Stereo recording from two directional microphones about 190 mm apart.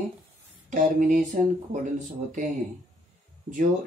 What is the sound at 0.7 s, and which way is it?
Speech, 45° right (ahead or behind).